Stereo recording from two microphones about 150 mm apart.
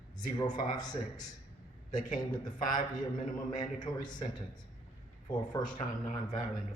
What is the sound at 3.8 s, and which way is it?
Speech, 30° left (ahead or behind).